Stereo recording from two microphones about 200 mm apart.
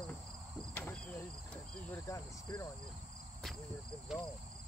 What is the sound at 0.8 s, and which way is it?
Insect, 10° left (ahead or behind).